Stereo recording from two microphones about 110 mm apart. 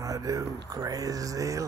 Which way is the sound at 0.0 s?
30° right (ahead or behind).